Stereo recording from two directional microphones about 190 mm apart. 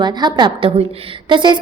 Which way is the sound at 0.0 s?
25° right (ahead or behind).